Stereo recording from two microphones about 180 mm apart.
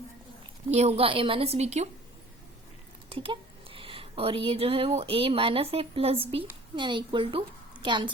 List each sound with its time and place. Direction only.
0.7 s a woman's voice: 35° right (ahead or behind)
3.1 s a woman's voice: 30° right (ahead or behind)